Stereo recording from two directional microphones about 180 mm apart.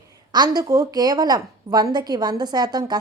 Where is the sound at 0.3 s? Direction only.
25° right (ahead or behind).